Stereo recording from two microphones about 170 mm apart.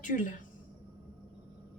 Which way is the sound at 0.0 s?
50° left (ahead or behind).